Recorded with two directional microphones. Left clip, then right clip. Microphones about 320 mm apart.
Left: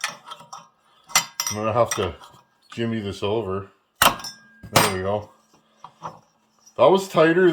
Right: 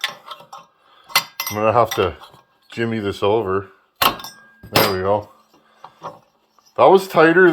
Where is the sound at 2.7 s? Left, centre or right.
Centre.